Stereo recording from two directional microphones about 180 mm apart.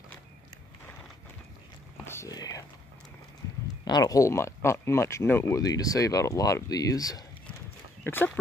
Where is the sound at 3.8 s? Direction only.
20° left (ahead or behind).